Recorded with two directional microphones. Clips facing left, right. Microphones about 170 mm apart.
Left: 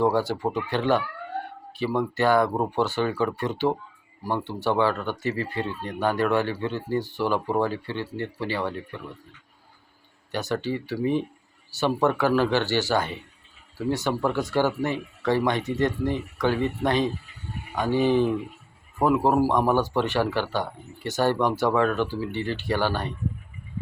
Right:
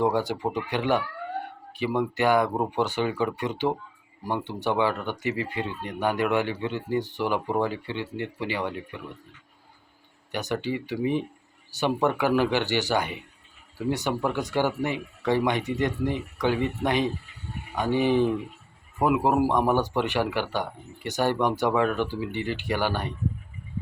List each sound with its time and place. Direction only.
0.0 s speech: 15° right (ahead or behind)
10.3 s speech: 15° right (ahead or behind)